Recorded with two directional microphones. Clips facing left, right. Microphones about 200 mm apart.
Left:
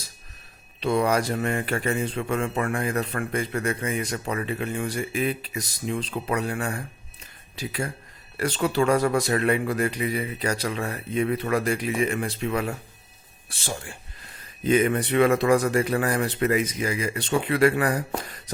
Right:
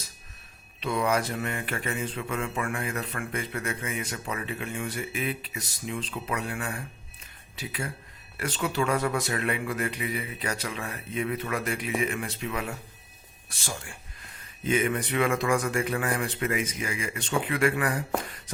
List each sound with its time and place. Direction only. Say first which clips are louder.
0.8 s mantra: left 4 dB; 35° left (ahead or behind)
7.5 s speech: left 5 dB; 40° left (ahead or behind)
8.4 s mantra: left 5 dB; 40° left (ahead or behind)
13.5 s speech: left 4 dB; 30° left (ahead or behind)
16.8 s mantra: left 6 dB; 35° left (ahead or behind)